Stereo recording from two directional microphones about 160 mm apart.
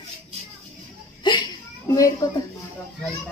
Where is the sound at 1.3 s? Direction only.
30° left (ahead or behind).